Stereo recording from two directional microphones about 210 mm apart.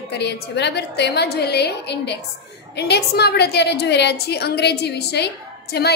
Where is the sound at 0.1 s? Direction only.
55° left (ahead or behind).